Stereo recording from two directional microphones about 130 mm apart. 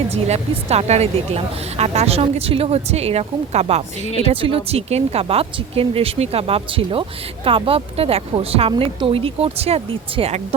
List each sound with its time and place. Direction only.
0.1 s speech: 55° right (ahead or behind)